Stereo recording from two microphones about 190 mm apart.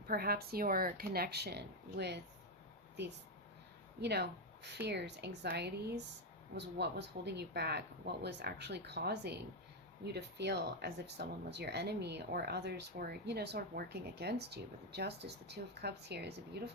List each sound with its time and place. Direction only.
0.1 s speech: 55° right (ahead or behind)
4.0 s speech: 60° right (ahead or behind)